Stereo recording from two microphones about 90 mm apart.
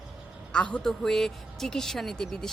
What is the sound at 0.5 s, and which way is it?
A woman's voice, 10° left (ahead or behind).